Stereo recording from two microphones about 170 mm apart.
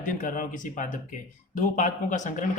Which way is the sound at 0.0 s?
50° left (ahead or behind).